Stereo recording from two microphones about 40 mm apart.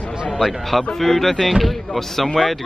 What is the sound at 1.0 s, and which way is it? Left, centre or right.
Speech, centre.